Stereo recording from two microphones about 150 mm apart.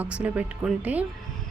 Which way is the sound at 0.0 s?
10° right (ahead or behind).